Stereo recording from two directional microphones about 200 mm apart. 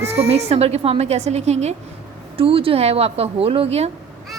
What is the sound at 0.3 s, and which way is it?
A woman's voice, 30° right (ahead or behind).